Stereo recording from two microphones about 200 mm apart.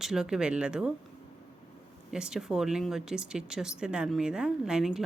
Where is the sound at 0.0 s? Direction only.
Centre (ahead or behind).